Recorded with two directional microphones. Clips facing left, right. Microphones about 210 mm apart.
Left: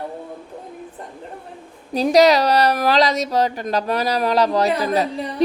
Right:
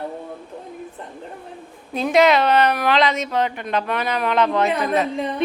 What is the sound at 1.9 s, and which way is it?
Speech, 35° left (ahead or behind).